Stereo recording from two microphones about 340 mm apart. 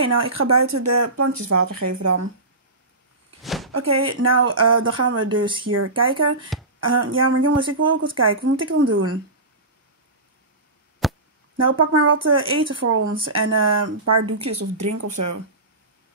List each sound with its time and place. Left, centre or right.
0.0 s speech: right
3.4 s a sound: centre
3.7 s speech: right
6.5 s speech: centre
6.9 s speech: right
11.0 s chop: centre
11.8 s speech: right